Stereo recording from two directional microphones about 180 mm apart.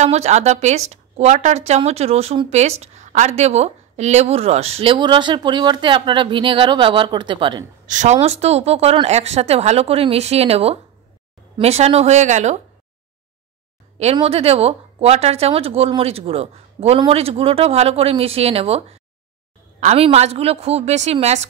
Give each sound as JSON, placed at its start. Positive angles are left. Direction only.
{"t": 0.0, "sound": "a woman's voice", "side_deg": -40}
{"t": 7.8, "sound": "a woman's voice", "side_deg": -45}
{"t": 13.9, "sound": "a woman's voice", "side_deg": -35}